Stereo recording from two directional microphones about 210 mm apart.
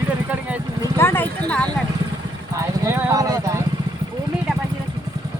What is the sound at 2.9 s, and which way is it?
Clip-clop, 15° right (ahead or behind).